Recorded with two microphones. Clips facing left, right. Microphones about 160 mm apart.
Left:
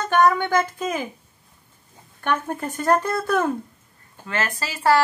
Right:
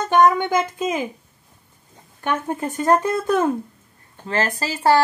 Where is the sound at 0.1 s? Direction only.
15° right (ahead or behind).